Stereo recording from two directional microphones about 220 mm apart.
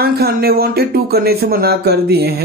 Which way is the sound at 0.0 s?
45° right (ahead or behind).